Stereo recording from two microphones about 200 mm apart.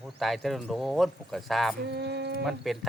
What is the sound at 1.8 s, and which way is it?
Speech, 60° right (ahead or behind).